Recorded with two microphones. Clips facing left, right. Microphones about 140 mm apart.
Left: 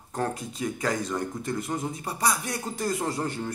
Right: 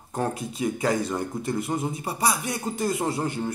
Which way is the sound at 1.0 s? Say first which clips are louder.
Right 2 dB; 30° right (ahead or behind).